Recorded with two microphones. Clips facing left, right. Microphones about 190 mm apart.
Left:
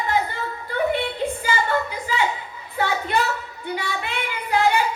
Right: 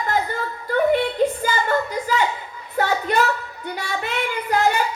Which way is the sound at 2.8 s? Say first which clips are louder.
Right 3 dB; 45° right (ahead or behind).